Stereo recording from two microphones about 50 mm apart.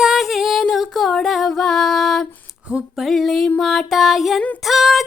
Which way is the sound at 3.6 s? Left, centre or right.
Centre.